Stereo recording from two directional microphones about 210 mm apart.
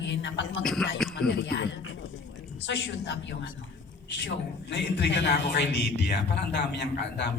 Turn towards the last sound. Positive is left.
turn(degrees=55)  # may be behind; listen again after turning